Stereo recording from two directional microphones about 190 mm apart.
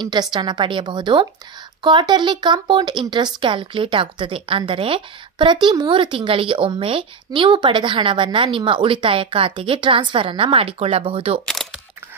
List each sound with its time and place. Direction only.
0.0 s a woman's voice: 25° right (ahead or behind)